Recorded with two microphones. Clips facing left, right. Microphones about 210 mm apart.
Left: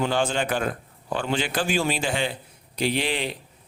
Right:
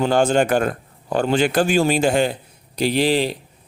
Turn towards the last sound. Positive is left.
turn(degrees=-35)  # may be behind; listen again after turning